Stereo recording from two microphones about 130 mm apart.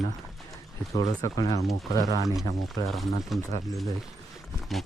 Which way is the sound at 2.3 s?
Centre (ahead or behind).